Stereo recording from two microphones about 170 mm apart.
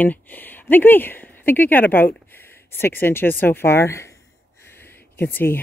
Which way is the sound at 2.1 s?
10° left (ahead or behind).